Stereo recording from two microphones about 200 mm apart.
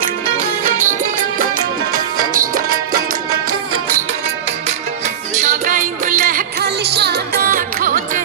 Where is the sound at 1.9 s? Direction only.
45° right (ahead or behind).